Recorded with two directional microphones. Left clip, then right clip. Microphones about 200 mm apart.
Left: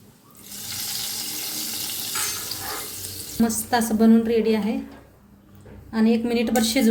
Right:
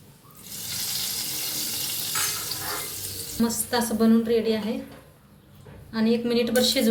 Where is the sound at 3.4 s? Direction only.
55° left (ahead or behind).